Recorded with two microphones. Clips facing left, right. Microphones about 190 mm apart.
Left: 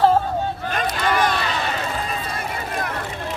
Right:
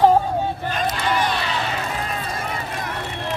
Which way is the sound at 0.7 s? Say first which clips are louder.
Left 3 dB; 50° left (ahead or behind).